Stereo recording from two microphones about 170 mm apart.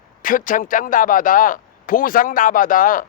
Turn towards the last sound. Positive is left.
turn(degrees=55)  # may be behind; listen again after turning